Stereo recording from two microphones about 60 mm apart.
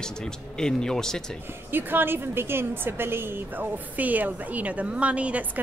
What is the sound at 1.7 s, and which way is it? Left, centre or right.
A woman's voice, right.